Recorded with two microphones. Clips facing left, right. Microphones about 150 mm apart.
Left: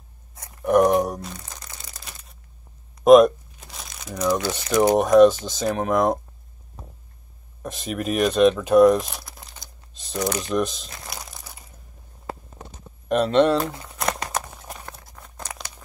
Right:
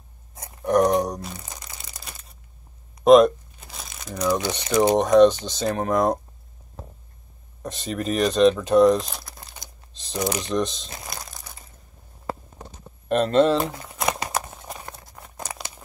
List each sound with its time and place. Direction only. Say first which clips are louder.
0.7 s crumpling: left 2 dB; 5° left (ahead or behind)
3.0 s crumpling: left 1 dB; 5° left (ahead or behind)
4.4 s speech: even; 20° right (ahead or behind)
4.9 s speech: left 1 dB; 5° left (ahead or behind)
7.6 s speech: even; 5° left (ahead or behind)
11.1 s crumpling: left 1 dB; centre (ahead or behind)
13.1 s speech: even; centre (ahead or behind)
13.6 s crumpling: even; 10° right (ahead or behind)
14.6 s a sound: right 1 dB; 5° right (ahead or behind)